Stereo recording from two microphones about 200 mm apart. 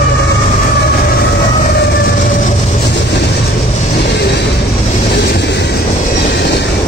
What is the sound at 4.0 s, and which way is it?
Vehicle, 55° left (ahead or behind).